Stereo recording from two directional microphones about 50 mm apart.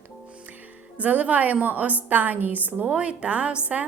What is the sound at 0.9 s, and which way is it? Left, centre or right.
A woman's voice, right.